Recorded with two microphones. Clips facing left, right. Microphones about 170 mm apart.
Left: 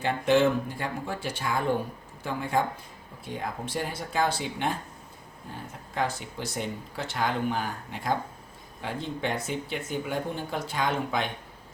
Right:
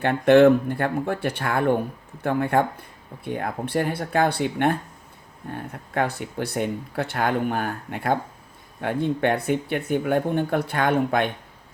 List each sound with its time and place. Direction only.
0.0 s speech: 60° right (ahead or behind)